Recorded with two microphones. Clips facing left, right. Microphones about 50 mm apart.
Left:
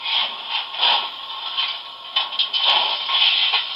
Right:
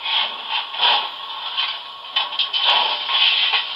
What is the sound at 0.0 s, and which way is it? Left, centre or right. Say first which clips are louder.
Wood: right 1 dB; centre.